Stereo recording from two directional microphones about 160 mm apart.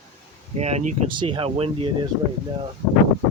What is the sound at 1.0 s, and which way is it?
Speech, 30° right (ahead or behind).